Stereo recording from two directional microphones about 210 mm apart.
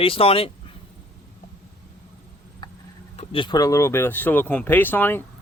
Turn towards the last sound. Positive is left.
turn(degrees=10)  # may be behind; listen again after turning